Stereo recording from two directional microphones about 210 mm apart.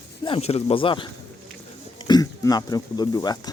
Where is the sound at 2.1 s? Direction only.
20° left (ahead or behind).